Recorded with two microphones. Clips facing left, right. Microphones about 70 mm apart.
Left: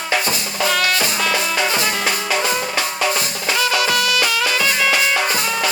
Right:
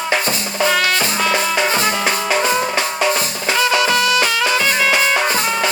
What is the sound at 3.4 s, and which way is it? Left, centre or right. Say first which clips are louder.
Music: right 3 dB; right.